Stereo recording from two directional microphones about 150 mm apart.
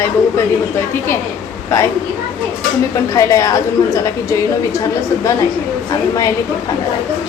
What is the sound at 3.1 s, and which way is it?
A woman's voice, 20° left (ahead or behind).